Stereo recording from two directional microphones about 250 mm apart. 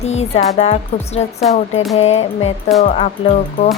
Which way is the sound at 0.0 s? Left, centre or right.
Left.